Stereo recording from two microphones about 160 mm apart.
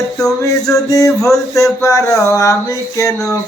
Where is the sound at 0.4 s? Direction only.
20° left (ahead or behind).